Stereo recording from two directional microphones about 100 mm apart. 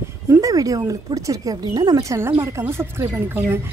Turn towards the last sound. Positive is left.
turn(degrees=-25)  # may be behind; listen again after turning